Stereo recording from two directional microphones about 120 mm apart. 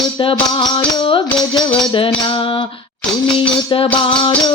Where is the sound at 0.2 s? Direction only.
45° left (ahead or behind).